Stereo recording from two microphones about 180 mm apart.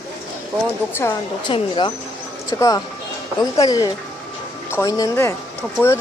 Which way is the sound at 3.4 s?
20° left (ahead or behind).